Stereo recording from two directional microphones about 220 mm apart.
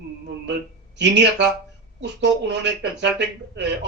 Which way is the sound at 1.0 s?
55° right (ahead or behind).